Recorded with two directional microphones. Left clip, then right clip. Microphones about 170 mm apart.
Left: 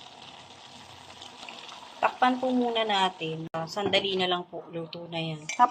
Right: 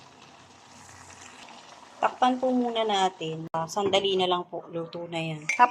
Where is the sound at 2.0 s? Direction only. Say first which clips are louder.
Even; 10° right (ahead or behind).